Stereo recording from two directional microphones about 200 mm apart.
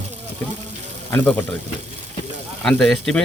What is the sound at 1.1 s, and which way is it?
Speech, 10° left (ahead or behind).